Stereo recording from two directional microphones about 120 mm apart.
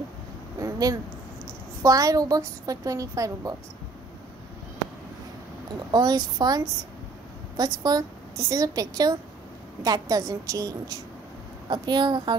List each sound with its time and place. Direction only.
0.6 s a sound: 30° right (ahead or behind)
1.8 s a woman's voice: 30° right (ahead or behind)
5.9 s a woman's voice: 35° right (ahead or behind)